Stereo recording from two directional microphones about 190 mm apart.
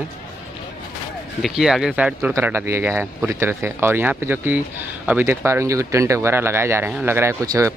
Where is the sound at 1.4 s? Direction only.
Centre (ahead or behind).